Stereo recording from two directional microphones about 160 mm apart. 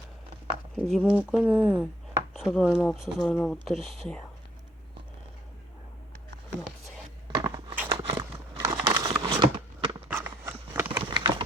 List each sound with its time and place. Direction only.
0.9 s speech: centre (ahead or behind)
7.3 s crunch: 25° right (ahead or behind)
7.9 s biting: 35° right (ahead or behind)
8.5 s a sound: 25° right (ahead or behind)
10.1 s a sound: 15° right (ahead or behind)
11.0 s clip-clop: 30° right (ahead or behind)